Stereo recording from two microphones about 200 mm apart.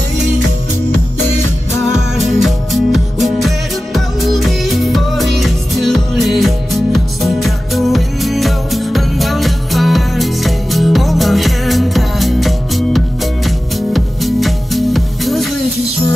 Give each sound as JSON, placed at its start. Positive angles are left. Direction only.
{"t": 1.8, "sound": "music", "side_deg": 0}